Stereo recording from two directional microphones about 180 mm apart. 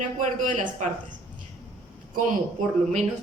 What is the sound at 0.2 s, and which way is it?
Speech, 45° right (ahead or behind).